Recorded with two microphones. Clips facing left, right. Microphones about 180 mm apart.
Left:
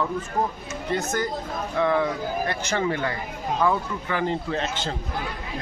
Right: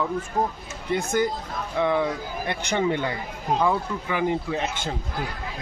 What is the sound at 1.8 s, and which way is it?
A man's voice, 15° right (ahead or behind).